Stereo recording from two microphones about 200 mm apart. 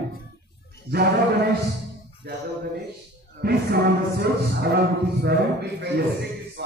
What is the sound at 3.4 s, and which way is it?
Speech, 55° right (ahead or behind).